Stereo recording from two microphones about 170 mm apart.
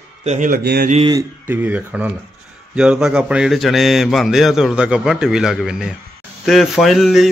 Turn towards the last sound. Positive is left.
turn(degrees=0)  # may be behind; listen again after turning